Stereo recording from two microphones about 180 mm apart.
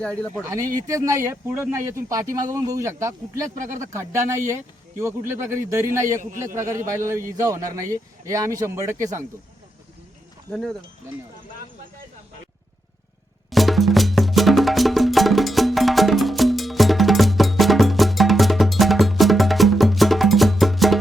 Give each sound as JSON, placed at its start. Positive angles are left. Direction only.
{"t": 0.0, "sound": "speech", "side_deg": 5}
{"t": 0.5, "sound": "speech", "side_deg": -20}
{"t": 10.5, "sound": "speech", "side_deg": 5}
{"t": 13.5, "sound": "music", "side_deg": 0}